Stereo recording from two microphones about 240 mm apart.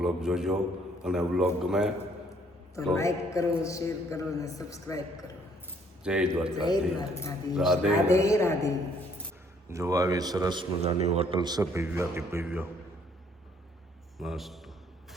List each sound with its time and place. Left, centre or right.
0.0 s a man's voice: centre
2.7 s a man's voice: centre
6.0 s a man's voice: centre
6.6 s a man's voice: centre
7.5 s a man's voice: centre
8.0 s a man's voice: centre
9.6 s a man's voice: centre
14.2 s a man's voice: centre